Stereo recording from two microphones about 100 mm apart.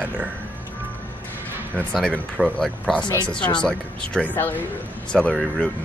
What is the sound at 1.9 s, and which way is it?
Speech, 5° left (ahead or behind).